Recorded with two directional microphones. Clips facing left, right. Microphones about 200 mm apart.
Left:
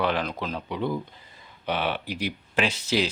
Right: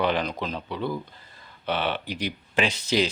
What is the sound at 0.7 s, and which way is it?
Speech, 15° left (ahead or behind).